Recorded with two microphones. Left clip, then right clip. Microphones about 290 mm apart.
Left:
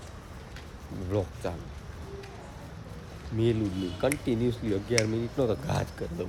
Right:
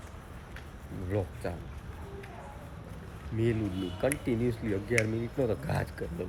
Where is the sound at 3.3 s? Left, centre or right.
Centre.